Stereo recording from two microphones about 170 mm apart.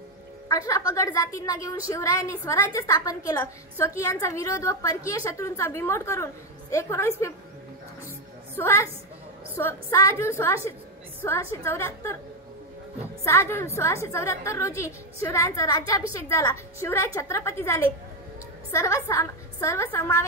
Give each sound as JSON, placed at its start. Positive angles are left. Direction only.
{"t": 0.5, "sound": "a woman's voice", "side_deg": 20}
{"t": 8.5, "sound": "a woman's voice", "side_deg": 15}
{"t": 13.2, "sound": "a woman's voice", "side_deg": 15}